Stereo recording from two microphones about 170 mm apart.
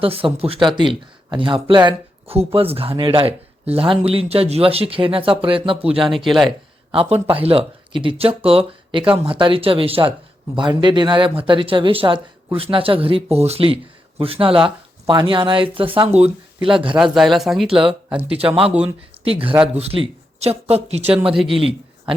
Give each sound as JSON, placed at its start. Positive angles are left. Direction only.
{"t": 0.0, "sound": "speech", "side_deg": -35}
{"t": 5.9, "sound": "speech", "side_deg": 0}
{"t": 6.9, "sound": "speech", "side_deg": -35}
{"t": 17.0, "sound": "speech", "side_deg": 0}
{"t": 17.7, "sound": "speech", "side_deg": -30}